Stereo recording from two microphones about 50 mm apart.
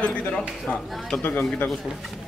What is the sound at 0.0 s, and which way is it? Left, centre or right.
Speech, left.